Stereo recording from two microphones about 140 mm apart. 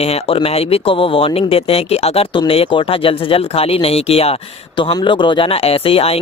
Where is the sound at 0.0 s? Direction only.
45° left (ahead or behind).